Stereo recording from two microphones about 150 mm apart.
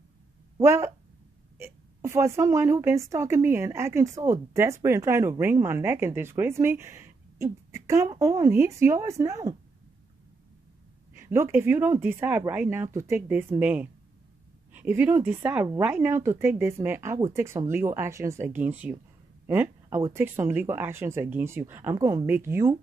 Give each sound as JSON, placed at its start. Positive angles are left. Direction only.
{"t": 0.6, "sound": "speech", "side_deg": -15}
{"t": 11.1, "sound": "speech", "side_deg": -15}